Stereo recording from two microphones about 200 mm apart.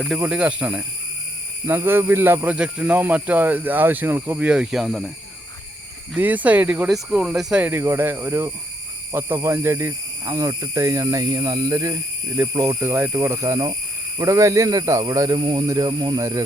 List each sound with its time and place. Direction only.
0.0 s speech: 5° right (ahead or behind)
6.1 s speech: 10° right (ahead or behind)